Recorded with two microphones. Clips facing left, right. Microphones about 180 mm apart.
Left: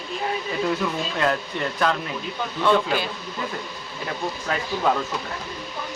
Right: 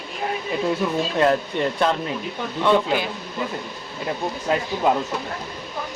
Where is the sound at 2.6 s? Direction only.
15° right (ahead or behind).